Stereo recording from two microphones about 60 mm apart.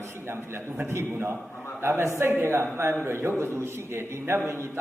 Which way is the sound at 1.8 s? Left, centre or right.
Right.